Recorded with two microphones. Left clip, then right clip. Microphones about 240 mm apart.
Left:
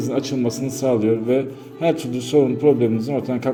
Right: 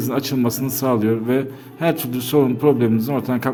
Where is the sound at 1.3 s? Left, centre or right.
Right.